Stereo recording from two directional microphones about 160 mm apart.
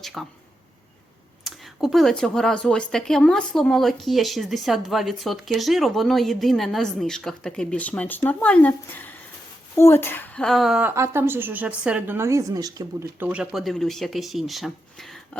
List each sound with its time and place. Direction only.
0.0 s speech: centre (ahead or behind)
1.5 s speech: centre (ahead or behind)